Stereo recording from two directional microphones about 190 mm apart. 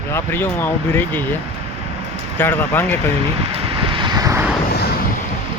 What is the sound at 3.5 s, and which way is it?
Vehicle, 30° right (ahead or behind).